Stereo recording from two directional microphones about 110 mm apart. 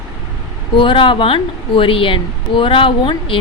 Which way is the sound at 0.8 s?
50° left (ahead or behind).